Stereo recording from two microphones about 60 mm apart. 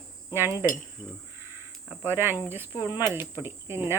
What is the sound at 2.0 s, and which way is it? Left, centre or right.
Cricket, right.